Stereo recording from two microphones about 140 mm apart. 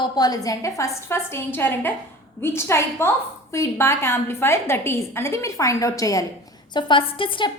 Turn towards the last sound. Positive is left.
turn(degrees=35)  # may be behind; listen again after turning